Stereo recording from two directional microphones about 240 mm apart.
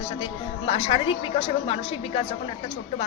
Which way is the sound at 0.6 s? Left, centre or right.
Left.